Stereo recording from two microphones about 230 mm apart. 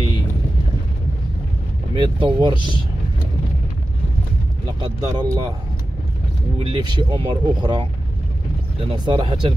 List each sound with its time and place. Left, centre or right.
2.0 s speech: right
4.7 s speech: centre
6.6 s speech: centre